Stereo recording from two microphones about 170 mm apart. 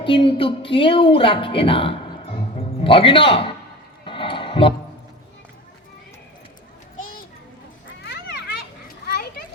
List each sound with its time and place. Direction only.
0.0 s speech: 30° left (ahead or behind)
4.0 s a sound: 30° left (ahead or behind)
8.0 s children playing: 80° left
9.0 s children playing: 65° left (ahead or behind)